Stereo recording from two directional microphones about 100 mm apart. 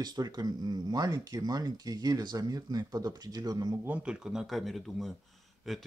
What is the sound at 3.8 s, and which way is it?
Speech, 15° right (ahead or behind).